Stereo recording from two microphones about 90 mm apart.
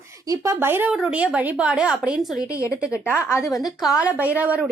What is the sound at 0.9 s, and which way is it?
A woman's voice, 15° right (ahead or behind).